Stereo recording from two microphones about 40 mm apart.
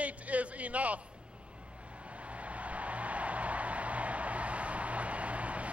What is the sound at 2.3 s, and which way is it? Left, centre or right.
Vehicle, right.